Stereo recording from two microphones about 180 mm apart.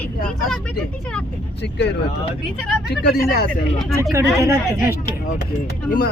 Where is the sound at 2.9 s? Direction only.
55° left (ahead or behind).